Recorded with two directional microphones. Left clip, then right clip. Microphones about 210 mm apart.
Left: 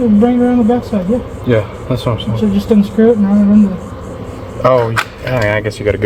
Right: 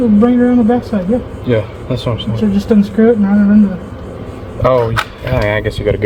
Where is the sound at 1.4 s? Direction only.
5° left (ahead or behind).